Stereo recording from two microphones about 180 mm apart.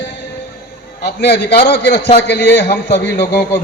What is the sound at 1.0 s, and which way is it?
A man's voice, 65° left (ahead or behind).